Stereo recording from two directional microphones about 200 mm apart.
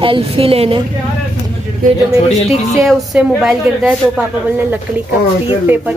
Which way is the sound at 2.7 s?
Centre (ahead or behind).